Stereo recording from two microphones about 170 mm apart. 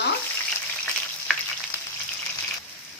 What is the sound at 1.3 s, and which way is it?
Frying, centre (ahead or behind).